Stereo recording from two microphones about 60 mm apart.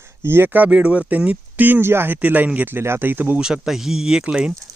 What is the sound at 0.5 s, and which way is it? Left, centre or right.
Speech, right.